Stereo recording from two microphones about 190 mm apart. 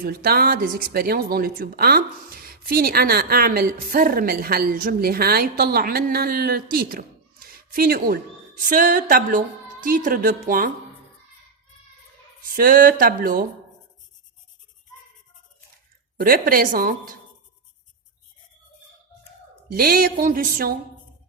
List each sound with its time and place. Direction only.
0.0 s speech: 55° right (ahead or behind)
12.4 s speech: 50° right (ahead or behind)
16.1 s speech: 50° right (ahead or behind)
19.7 s speech: 50° right (ahead or behind)